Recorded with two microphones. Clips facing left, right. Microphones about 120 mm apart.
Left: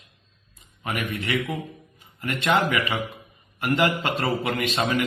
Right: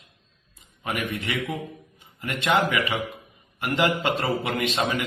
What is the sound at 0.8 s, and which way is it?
A man's voice, 15° right (ahead or behind).